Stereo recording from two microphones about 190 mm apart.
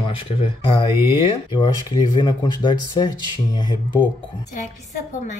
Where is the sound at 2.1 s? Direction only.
25° left (ahead or behind).